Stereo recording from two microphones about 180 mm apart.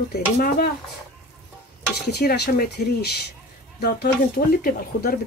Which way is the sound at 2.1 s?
65° left (ahead or behind).